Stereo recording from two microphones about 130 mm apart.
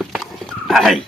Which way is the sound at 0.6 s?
Centre (ahead or behind).